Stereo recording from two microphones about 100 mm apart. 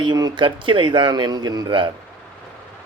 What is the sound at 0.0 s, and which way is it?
Speech, 45° right (ahead or behind).